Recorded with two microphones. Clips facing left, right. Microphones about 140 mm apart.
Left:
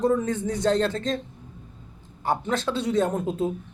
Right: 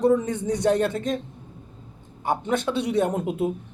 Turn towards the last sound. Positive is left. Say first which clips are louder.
# right 1 dB
turn(degrees=-10)  # may be behind; listen again after turning